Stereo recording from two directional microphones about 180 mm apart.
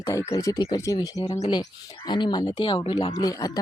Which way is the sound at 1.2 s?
40° left (ahead or behind).